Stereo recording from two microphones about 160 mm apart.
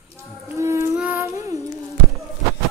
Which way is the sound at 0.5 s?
15° right (ahead or behind).